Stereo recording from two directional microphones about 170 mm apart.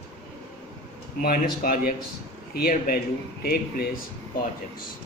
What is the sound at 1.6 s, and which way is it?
A man's voice, 55° left (ahead or behind).